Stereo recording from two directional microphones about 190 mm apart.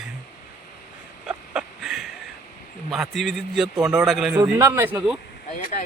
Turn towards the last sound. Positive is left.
turn(degrees=40)  # may be behind; listen again after turning